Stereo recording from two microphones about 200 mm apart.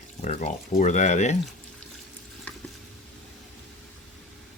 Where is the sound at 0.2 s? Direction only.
35° left (ahead or behind).